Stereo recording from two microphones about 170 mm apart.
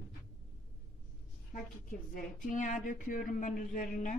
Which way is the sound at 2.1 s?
50° left (ahead or behind).